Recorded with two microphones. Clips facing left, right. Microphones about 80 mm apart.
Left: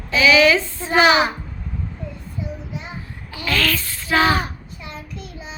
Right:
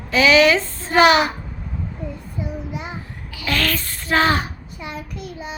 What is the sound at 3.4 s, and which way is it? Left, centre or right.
Speech, right.